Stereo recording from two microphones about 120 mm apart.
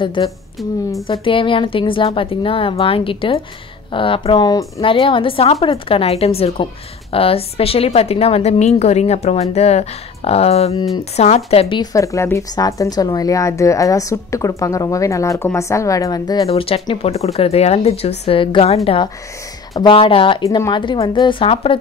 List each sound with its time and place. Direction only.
0.0 s a woman's voice: 40° left (ahead or behind)
4.7 s a woman's voice: 50° left (ahead or behind)
11.8 s a woman's voice: 25° left (ahead or behind)
16.4 s a woman's voice: 55° left (ahead or behind)
20.4 s a woman's voice: 25° left (ahead or behind)
20.7 s speech: 40° left (ahead or behind)